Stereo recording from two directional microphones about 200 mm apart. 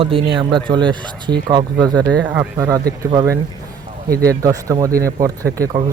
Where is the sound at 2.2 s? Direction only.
10° right (ahead or behind).